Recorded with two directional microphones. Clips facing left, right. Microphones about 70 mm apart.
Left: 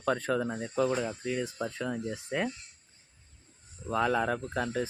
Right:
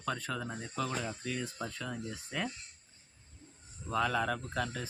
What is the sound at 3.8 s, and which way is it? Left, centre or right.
Speech, left.